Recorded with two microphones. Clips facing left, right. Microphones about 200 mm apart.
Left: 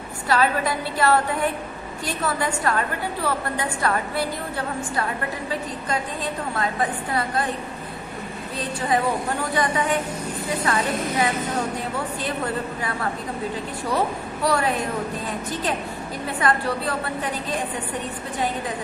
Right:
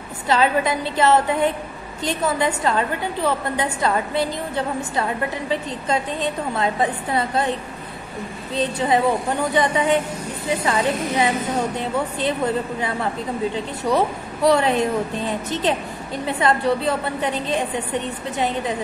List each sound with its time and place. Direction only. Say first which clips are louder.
0.3 s a woman's voice: right 3 dB; 20° right (ahead or behind)
8.5 s a woman's voice: right 4 dB; 25° right (ahead or behind)
13.9 s a woman's voice: right 2 dB; 20° right (ahead or behind)
16.3 s a woman's voice: right 4 dB; 25° right (ahead or behind)